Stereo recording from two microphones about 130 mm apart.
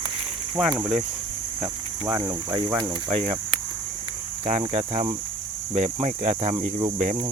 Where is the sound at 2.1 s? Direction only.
35° right (ahead or behind).